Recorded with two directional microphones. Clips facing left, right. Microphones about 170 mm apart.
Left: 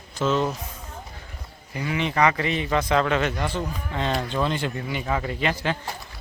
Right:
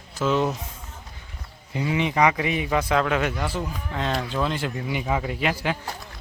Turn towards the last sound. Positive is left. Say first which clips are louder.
# even
turn(degrees=-10)  # may be behind; listen again after turning